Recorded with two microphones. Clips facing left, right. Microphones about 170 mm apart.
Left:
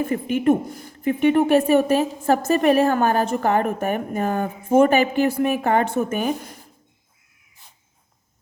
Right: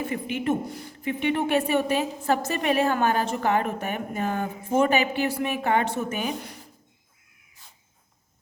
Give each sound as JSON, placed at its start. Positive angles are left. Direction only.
{"t": 0.0, "sound": "a woman's voice", "side_deg": 45}